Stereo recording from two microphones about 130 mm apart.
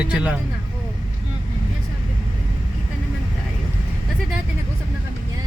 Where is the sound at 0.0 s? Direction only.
10° right (ahead or behind).